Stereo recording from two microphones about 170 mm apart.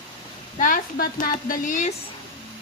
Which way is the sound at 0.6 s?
55° left (ahead or behind).